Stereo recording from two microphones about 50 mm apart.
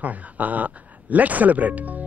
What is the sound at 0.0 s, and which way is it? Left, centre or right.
Speech, right.